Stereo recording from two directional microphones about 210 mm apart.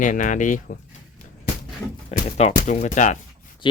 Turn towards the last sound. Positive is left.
turn(degrees=35)  # may be behind; listen again after turning